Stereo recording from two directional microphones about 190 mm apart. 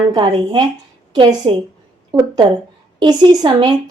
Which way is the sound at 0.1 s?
25° right (ahead or behind).